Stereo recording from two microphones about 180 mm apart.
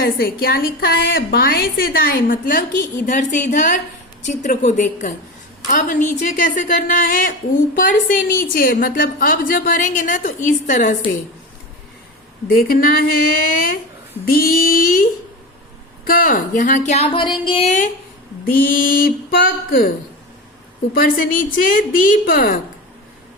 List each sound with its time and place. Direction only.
0.0 s a woman's voice: 55° left (ahead or behind)
12.5 s a woman's voice: 55° left (ahead or behind)
14.3 s a woman's voice: 55° left (ahead or behind)
16.0 s speech: 50° left (ahead or behind)
18.4 s a woman's voice: 50° left (ahead or behind)
20.9 s a woman's voice: 50° left (ahead or behind)